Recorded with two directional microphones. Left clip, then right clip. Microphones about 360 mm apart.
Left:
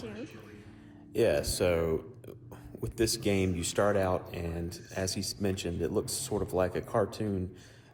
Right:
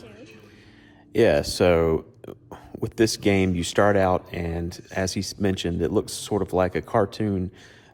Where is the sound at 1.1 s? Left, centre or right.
Right.